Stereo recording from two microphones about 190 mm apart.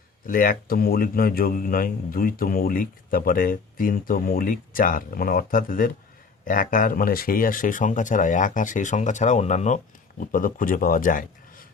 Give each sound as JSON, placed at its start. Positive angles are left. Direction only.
{"t": 0.3, "sound": "a man's voice", "side_deg": 50}